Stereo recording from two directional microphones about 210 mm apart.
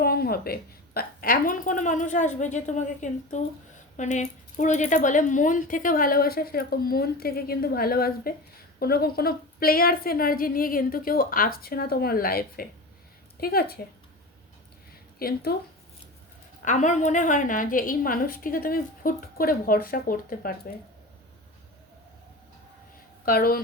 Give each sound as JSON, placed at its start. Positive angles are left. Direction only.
{"t": 0.0, "sound": "a sound", "side_deg": 45}
{"t": 0.9, "sound": "a woman's voice", "side_deg": 45}
{"t": 15.2, "sound": "speech", "side_deg": 45}
{"t": 16.6, "sound": "a woman's voice", "side_deg": 35}
{"t": 23.2, "sound": "speech", "side_deg": 45}